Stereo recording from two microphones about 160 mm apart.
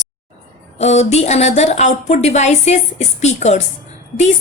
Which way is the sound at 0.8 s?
45° left (ahead or behind).